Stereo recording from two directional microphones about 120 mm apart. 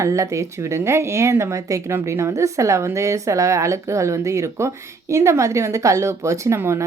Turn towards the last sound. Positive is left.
turn(degrees=-20)  # may be behind; listen again after turning